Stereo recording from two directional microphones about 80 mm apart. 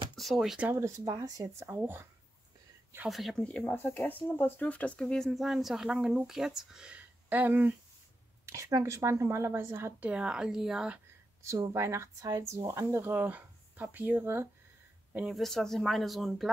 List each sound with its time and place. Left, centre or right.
0.1 s a sound: centre
0.7 s speech: right
1.0 s speech: right
1.6 s speech: right
3.1 s a woman's voice: centre
3.4 s speech: centre
5.4 s a woman's voice: centre
7.2 s speech: right
8.5 s speech: right
9.9 s speech: centre
11.4 s speech: right
15.3 s a woman's voice: centre